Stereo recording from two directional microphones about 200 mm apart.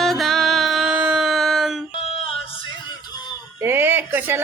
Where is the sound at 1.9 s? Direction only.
30° left (ahead or behind).